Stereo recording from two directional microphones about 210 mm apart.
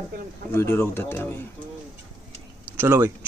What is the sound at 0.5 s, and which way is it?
Speech, 10° left (ahead or behind).